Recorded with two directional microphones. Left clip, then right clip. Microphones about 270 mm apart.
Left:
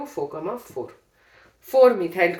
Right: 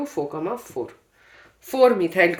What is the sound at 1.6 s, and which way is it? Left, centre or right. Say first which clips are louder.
Speech: left 1 dB; right.